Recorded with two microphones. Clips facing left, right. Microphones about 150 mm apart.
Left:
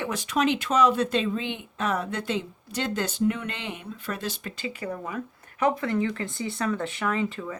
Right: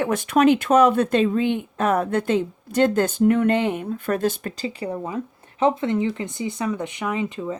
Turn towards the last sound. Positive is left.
turn(degrees=-20)  # may be behind; listen again after turning